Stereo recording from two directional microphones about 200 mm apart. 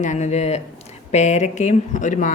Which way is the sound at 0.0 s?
35° left (ahead or behind).